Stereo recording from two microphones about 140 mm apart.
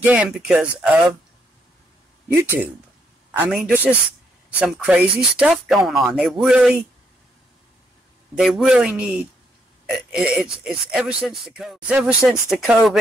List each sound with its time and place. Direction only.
0.0 s speech: 10° right (ahead or behind)
2.2 s speech: 15° right (ahead or behind)
8.4 s speech: 5° right (ahead or behind)